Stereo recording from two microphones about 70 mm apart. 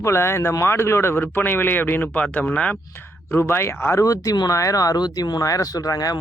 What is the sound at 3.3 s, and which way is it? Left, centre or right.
Speech, left.